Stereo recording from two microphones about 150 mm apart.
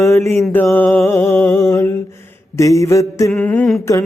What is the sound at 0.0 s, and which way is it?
Mantra, 20° left (ahead or behind).